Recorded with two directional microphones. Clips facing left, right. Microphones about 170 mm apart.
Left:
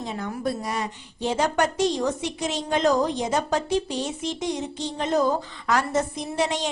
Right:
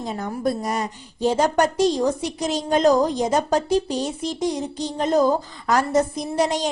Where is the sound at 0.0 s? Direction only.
40° right (ahead or behind).